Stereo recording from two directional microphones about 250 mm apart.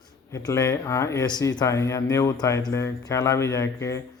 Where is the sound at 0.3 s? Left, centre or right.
Centre.